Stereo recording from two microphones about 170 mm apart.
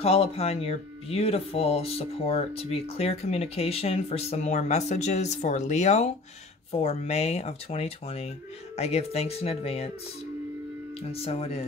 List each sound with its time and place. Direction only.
0.0 s speech: 35° left (ahead or behind)
11.0 s speech: 35° left (ahead or behind)